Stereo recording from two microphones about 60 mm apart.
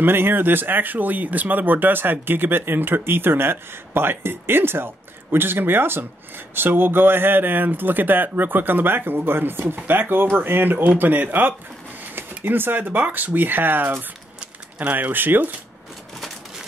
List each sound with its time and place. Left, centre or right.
0.0 s speech: right